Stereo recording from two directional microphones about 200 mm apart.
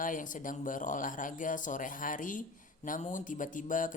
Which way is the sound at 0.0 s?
40° left (ahead or behind).